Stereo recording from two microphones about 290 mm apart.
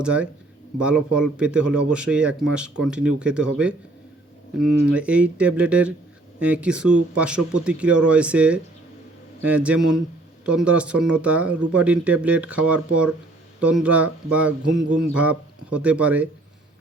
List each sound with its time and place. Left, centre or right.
0.0 s speech: centre